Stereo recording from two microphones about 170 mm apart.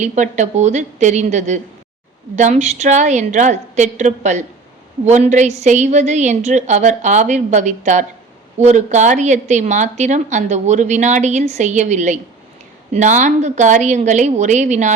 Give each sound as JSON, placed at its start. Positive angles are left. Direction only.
{"t": 0.0, "sound": "speech", "side_deg": -45}